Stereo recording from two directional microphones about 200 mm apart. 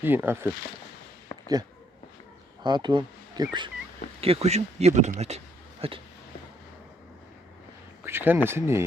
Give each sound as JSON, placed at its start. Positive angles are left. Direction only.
{"t": 0.0, "sound": "speech", "side_deg": -10}
{"t": 2.6, "sound": "speech", "side_deg": -20}
{"t": 8.0, "sound": "speech", "side_deg": -10}